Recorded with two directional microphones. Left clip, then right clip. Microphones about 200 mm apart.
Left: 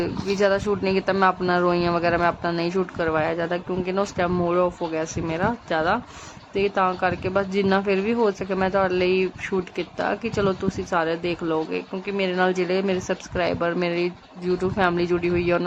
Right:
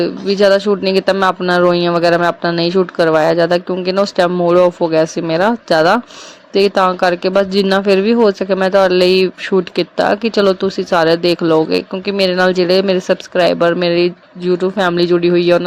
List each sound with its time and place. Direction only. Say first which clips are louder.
0.0 s speech: right 10 dB; 20° right (ahead or behind)